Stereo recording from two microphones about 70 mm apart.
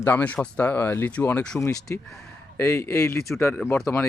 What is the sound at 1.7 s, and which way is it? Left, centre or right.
Speech, left.